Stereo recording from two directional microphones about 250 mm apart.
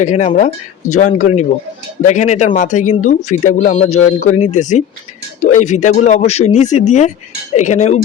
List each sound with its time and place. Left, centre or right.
0.0 s speech: left